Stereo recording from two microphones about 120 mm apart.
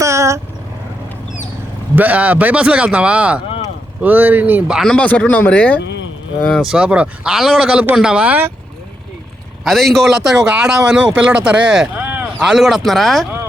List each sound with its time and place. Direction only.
0.0 s vehicle: 25° right (ahead or behind)
2.0 s speech: 10° right (ahead or behind)
4.8 s speech: 10° left (ahead or behind)
6.5 s speech: centre (ahead or behind)
9.6 s a man's voice: centre (ahead or behind)
12.0 s a sound: 15° right (ahead or behind)
12.4 s a man's voice: centre (ahead or behind)